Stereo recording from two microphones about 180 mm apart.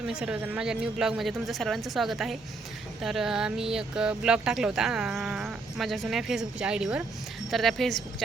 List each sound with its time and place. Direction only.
0.1 s speech: 5° right (ahead or behind)